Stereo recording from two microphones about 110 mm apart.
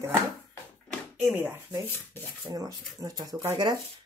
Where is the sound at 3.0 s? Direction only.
35° right (ahead or behind).